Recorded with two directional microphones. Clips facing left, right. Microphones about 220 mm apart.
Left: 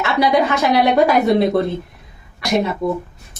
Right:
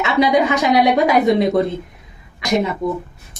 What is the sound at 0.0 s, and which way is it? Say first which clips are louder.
Speech: right 1 dB; 20° right (ahead or behind).